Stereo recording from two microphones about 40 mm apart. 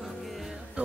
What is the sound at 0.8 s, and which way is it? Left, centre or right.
Speech, right.